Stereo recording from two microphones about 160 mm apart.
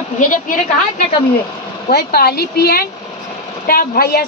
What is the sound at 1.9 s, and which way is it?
Speech, 75° left (ahead or behind).